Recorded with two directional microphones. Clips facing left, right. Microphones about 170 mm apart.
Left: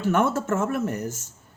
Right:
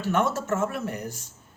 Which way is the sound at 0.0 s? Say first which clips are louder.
Left 3 dB; 55° left (ahead or behind).